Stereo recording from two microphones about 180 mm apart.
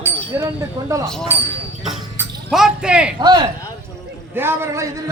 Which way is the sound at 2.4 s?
Centre (ahead or behind).